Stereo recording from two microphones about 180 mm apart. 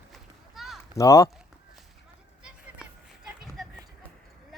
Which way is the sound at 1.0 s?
15° left (ahead or behind).